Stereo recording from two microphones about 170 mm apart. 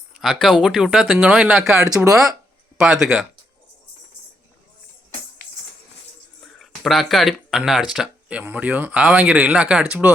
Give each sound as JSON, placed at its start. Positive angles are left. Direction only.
{"t": 0.1, "sound": "speech", "side_deg": 0}
{"t": 1.9, "sound": "speech", "side_deg": -20}
{"t": 2.8, "sound": "speech", "side_deg": -5}
{"t": 6.4, "sound": "speech", "side_deg": 0}